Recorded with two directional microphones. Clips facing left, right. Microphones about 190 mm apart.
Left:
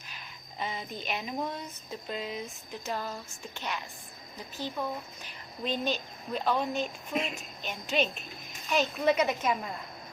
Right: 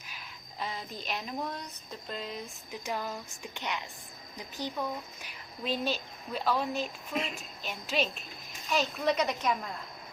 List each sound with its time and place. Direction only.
0.2 s speech: centre (ahead or behind)
2.8 s speech: 15° right (ahead or behind)
5.2 s a woman's voice: 5° right (ahead or behind)